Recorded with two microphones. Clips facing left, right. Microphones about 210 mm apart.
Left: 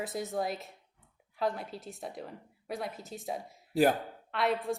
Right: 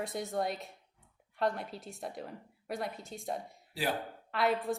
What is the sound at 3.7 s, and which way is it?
Speech, 45° left (ahead or behind).